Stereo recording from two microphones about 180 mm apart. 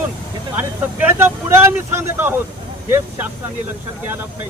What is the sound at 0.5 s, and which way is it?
Speech, 10° right (ahead or behind).